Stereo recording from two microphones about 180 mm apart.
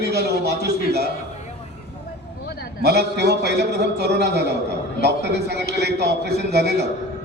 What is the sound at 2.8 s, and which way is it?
A man's voice, 65° right (ahead or behind).